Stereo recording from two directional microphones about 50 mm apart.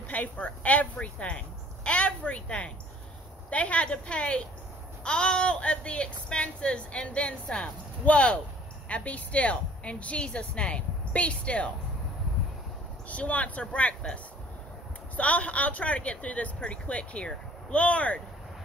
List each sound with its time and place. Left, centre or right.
0.1 s speech: left
13.1 s speech: left